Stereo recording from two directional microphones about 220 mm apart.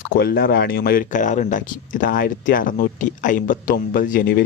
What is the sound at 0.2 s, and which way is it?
Speech, 45° left (ahead or behind).